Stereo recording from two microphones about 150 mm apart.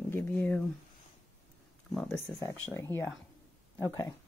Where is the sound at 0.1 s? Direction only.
15° left (ahead or behind).